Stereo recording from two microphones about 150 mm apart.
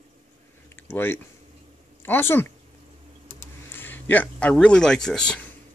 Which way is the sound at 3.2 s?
20° left (ahead or behind).